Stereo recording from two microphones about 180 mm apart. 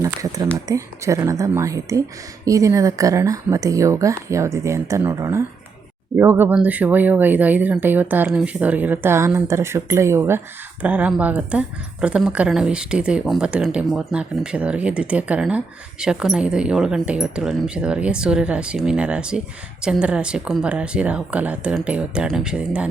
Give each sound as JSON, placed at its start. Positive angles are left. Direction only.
{"t": 0.0, "sound": "a woman's voice", "side_deg": -20}